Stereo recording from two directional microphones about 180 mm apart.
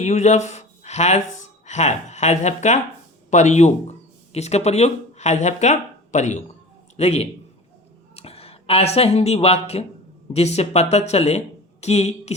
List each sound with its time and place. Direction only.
0.0 s speech: 40° left (ahead or behind)